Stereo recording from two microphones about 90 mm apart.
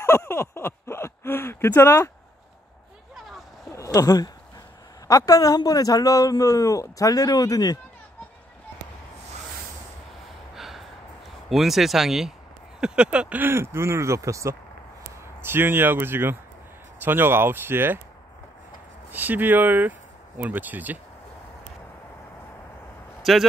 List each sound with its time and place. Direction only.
0.0 s a sound: 30° left (ahead or behind)
3.7 s a man's voice: 40° left (ahead or behind)
10.5 s gasp: 5° right (ahead or behind)
11.4 s speech: 5° right (ahead or behind); by 14.5 s 35° right (ahead or behind)
15.4 s speech: 25° right (ahead or behind)
19.0 s speech: 20° right (ahead or behind)
23.3 s speech: 5° right (ahead or behind)